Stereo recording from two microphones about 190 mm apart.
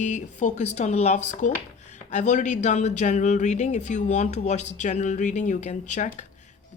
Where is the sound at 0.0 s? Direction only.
40° left (ahead or behind).